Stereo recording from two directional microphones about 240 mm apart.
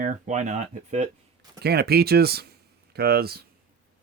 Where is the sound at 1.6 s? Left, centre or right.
Right.